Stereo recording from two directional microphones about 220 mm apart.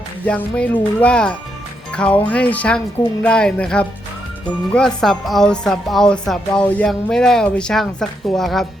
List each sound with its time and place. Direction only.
0.3 s a woman's voice: 5° left (ahead or behind)